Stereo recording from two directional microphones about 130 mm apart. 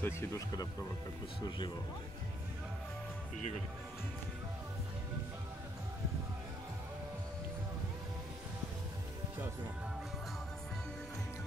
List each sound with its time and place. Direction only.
0.0 s speech: 20° left (ahead or behind)